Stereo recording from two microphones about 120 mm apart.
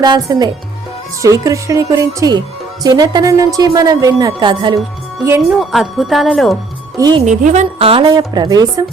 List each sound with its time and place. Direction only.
0.0 s a woman's voice: 35° right (ahead or behind)
5.5 s speech: centre (ahead or behind)
6.9 s speech: 30° right (ahead or behind)
7.2 s a woman's voice: 80° right
7.9 s a woman's voice: 50° right (ahead or behind)
8.1 s a woman's voice: 35° right (ahead or behind)